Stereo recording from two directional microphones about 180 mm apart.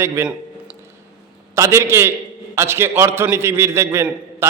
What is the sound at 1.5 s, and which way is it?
A man's voice, 15° right (ahead or behind).